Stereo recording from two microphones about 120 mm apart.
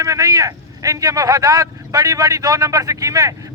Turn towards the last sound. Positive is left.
turn(degrees=-25)  # may be behind; listen again after turning